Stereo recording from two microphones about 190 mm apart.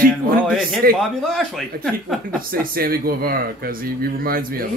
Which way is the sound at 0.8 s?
50° right (ahead or behind).